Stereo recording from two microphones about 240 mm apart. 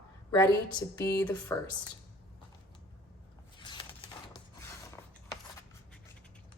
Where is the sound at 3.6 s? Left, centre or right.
Centre.